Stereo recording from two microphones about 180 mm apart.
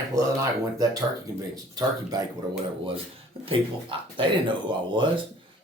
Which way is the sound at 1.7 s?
20° right (ahead or behind).